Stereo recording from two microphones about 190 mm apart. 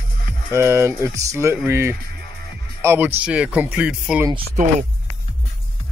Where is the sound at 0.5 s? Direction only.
15° right (ahead or behind).